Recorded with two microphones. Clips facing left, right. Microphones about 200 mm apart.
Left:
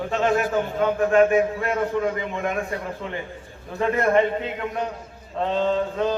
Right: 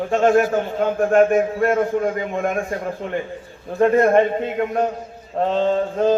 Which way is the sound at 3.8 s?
50° right (ahead or behind).